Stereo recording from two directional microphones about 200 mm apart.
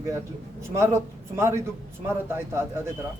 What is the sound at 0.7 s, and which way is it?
Speech, 15° right (ahead or behind).